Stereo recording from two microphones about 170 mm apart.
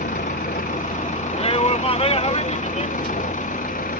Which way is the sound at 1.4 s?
35° left (ahead or behind).